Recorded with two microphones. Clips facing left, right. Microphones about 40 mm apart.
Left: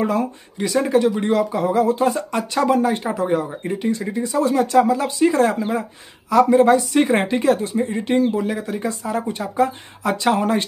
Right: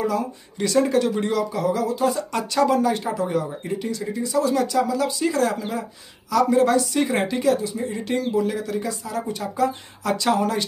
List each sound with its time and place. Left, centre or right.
0.6 s speech: centre
1.2 s speech: left
2.3 s speech: left